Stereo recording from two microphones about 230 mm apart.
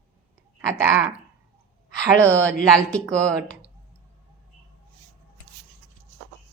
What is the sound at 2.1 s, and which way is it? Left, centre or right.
Speech, centre.